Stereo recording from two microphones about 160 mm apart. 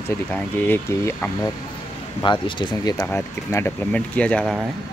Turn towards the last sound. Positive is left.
turn(degrees=5)  # may be behind; listen again after turning